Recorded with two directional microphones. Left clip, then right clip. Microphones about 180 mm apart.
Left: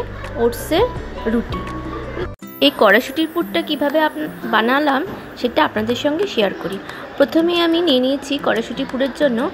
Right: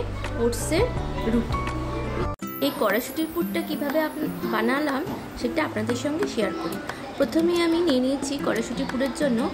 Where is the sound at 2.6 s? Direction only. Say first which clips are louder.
Left 11 dB; 20° left (ahead or behind).